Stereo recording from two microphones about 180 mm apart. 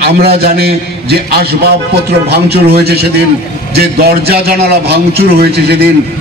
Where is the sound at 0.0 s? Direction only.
60° right (ahead or behind).